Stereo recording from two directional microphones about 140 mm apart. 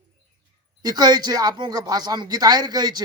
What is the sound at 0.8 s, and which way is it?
A man's voice, 30° right (ahead or behind).